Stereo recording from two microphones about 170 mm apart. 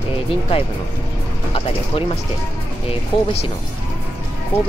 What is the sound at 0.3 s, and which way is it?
Speech, 35° left (ahead or behind).